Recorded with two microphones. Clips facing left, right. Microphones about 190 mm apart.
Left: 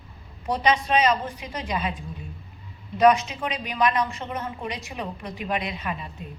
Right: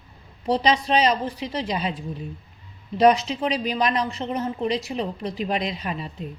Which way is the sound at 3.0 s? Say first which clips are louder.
Right 1 dB; 35° right (ahead or behind).